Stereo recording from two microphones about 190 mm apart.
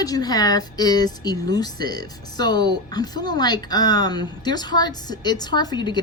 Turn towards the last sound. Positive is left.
turn(degrees=20)  # may be behind; listen again after turning